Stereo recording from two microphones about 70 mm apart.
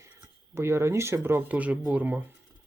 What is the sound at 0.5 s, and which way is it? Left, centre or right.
Speech, right.